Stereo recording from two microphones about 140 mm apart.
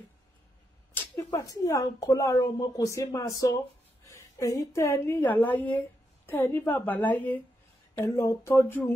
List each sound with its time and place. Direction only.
0.9 s a woman's voice: 25° left (ahead or behind)